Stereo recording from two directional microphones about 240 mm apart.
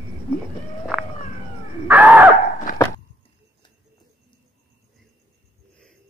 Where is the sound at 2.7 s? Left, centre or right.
Left.